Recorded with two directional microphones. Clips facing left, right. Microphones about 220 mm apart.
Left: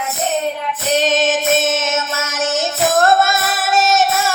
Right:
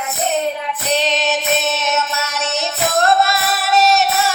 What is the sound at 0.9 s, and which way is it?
Child singing, 45° left (ahead or behind).